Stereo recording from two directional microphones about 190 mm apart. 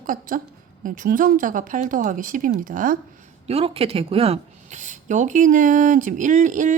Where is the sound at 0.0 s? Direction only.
45° right (ahead or behind).